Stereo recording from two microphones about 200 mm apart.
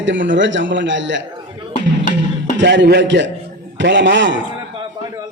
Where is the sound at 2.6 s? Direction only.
60° right (ahead or behind).